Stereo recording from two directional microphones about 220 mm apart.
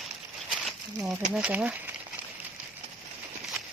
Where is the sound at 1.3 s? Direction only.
5° right (ahead or behind).